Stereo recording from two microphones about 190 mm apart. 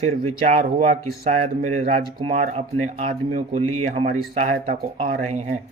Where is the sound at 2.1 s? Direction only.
30° right (ahead or behind).